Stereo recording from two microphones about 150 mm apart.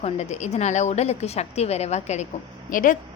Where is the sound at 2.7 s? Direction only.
65° left (ahead or behind).